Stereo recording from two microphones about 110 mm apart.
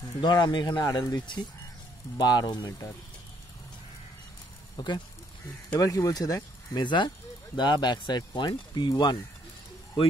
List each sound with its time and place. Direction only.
0.2 s speech: 40° left (ahead or behind)
4.7 s speech: 40° left (ahead or behind)